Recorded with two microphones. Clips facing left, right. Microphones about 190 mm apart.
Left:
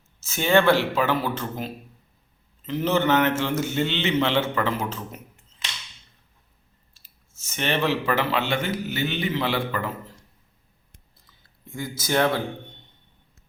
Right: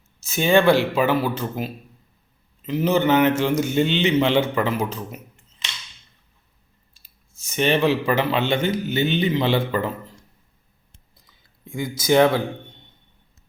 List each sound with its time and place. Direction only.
0.2 s a man's voice: 15° right (ahead or behind)
6.9 s speech: 15° right (ahead or behind)
11.7 s a man's voice: 15° right (ahead or behind)